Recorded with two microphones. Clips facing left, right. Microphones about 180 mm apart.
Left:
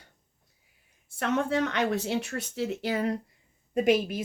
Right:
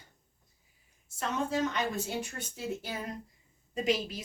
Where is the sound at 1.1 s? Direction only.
65° left (ahead or behind).